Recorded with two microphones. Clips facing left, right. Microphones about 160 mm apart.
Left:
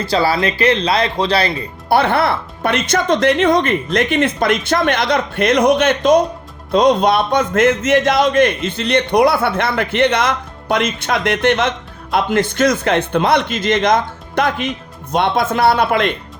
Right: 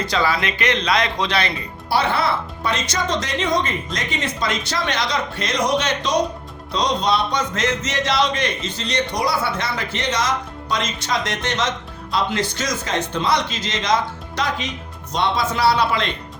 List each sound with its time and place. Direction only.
0.0 s speech: 35° left (ahead or behind)
1.9 s speech: 55° left (ahead or behind)